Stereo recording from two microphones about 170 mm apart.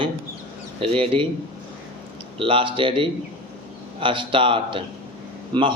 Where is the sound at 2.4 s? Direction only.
30° right (ahead or behind).